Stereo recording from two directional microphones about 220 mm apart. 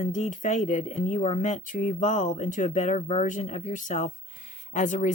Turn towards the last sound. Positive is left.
turn(degrees=35)  # may be behind; listen again after turning